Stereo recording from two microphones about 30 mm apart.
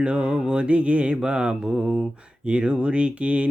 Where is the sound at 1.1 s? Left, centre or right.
Right.